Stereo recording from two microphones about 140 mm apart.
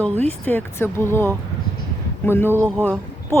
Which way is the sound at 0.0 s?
15° left (ahead or behind).